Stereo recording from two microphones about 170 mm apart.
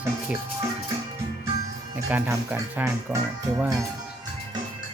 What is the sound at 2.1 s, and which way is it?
Speech, 15° right (ahead or behind).